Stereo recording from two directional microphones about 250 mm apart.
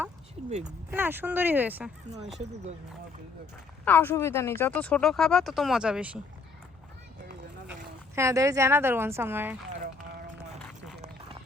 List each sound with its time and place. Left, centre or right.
0.9 s speech: centre
3.8 s speech: centre
8.1 s speech: centre
9.7 s run: right